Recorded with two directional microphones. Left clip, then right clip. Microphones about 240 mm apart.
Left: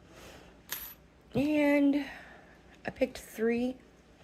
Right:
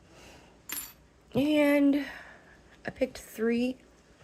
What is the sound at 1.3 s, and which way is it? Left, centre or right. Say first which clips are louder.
Speech: right 3 dB; centre.